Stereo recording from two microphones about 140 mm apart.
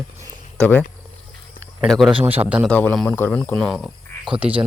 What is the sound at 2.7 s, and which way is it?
Speech, 10° left (ahead or behind).